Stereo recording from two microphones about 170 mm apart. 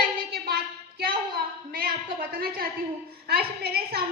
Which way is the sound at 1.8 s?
60° right (ahead or behind).